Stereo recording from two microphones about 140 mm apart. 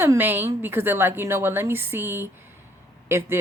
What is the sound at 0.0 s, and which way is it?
Speech, 15° right (ahead or behind).